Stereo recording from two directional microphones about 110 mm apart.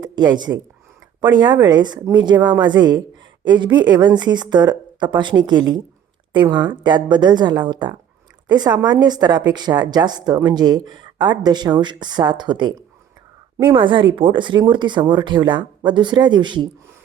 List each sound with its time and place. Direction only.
0.0 s a woman's voice: 40° right (ahead or behind)